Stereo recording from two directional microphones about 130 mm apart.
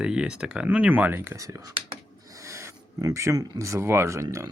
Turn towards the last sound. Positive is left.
turn(degrees=-25)  # may be behind; listen again after turning